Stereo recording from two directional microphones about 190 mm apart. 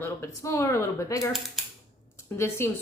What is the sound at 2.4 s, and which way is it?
Speech, 15° left (ahead or behind).